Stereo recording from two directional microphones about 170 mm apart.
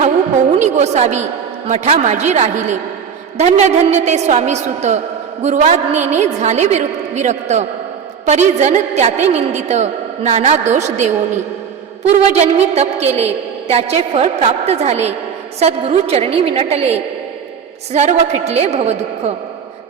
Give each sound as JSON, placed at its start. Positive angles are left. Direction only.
{"t": 0.6, "sound": "a woman's voice", "side_deg": -40}
{"t": 12.1, "sound": "a woman's voice", "side_deg": -40}